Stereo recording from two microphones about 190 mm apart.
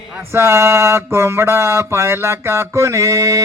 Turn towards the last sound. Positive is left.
turn(degrees=-15)  # may be behind; listen again after turning